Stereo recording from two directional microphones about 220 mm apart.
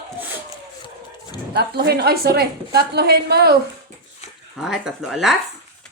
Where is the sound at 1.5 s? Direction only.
50° right (ahead or behind).